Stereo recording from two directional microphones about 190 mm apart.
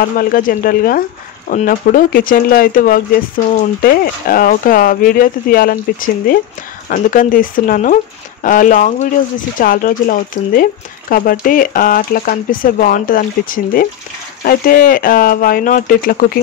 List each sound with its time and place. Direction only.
0.2 s speech: 45° left (ahead or behind)